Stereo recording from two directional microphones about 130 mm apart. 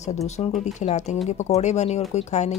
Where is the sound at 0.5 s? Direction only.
65° left (ahead or behind).